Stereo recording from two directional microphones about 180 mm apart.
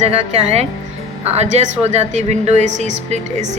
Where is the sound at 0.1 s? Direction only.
35° right (ahead or behind).